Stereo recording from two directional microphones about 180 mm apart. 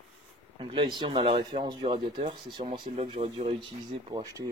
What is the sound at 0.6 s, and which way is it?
Speech, 30° right (ahead or behind).